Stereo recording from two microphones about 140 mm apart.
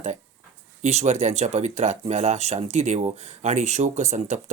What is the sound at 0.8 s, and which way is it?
Speech, 55° right (ahead or behind).